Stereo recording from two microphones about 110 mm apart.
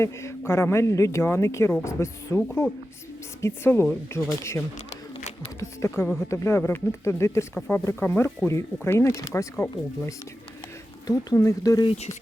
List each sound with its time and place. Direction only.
0.0 s speech: 25° left (ahead or behind)
11.0 s speech: 35° left (ahead or behind)
11.9 s speech: 70° left (ahead or behind)